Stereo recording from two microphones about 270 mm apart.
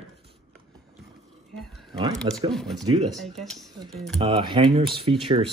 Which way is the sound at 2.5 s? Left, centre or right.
Centre.